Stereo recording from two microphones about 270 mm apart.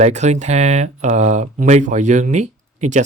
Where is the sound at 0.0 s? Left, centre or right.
Right.